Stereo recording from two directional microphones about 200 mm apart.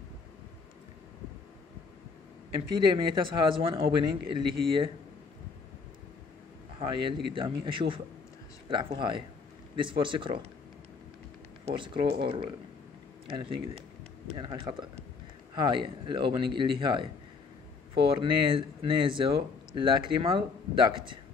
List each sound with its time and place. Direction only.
2.7 s speech: 25° right (ahead or behind)
6.8 s speech: 25° right (ahead or behind)
11.6 s speech: 25° right (ahead or behind)